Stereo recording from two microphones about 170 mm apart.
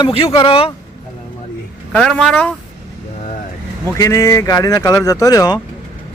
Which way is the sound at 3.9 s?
20° left (ahead or behind).